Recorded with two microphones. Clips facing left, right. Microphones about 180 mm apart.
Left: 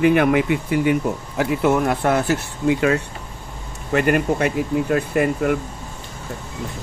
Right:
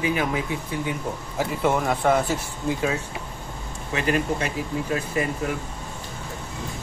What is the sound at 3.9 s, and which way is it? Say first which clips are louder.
Speech: left 6 dB; 60° left (ahead or behind).